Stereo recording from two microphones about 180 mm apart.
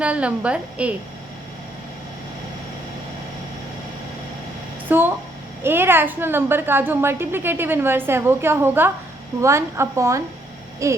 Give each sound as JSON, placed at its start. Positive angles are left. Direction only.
{"t": 0.0, "sound": "a woman's voice", "side_deg": -5}
{"t": 4.9, "sound": "a sound", "side_deg": -10}
{"t": 5.6, "sound": "a woman's voice", "side_deg": -10}